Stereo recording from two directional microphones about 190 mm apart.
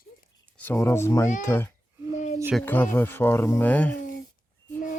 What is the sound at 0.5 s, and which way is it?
Speech, 10° left (ahead or behind).